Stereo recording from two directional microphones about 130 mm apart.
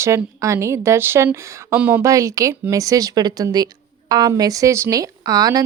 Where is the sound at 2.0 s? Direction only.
25° right (ahead or behind).